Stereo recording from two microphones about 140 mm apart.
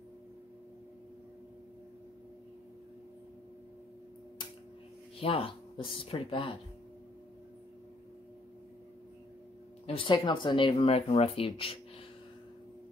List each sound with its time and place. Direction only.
5.2 s speech: 40° left (ahead or behind)
9.8 s speech: 35° left (ahead or behind)